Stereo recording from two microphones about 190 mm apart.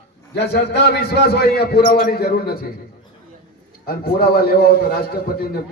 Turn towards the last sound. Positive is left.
turn(degrees=55)  # may be behind; listen again after turning